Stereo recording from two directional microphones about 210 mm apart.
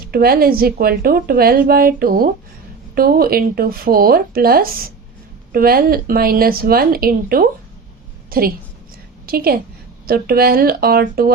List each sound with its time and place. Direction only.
0.1 s a woman's voice: 45° right (ahead or behind)